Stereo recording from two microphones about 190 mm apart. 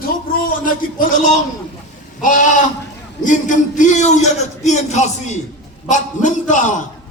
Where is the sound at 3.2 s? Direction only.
40° left (ahead or behind).